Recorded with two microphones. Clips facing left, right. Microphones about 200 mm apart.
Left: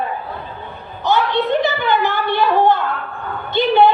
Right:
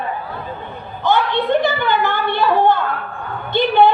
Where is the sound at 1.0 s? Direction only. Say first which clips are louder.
Even; 55° right (ahead or behind).